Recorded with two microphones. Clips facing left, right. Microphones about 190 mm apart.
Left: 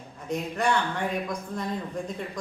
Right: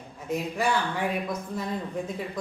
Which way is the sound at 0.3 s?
5° right (ahead or behind).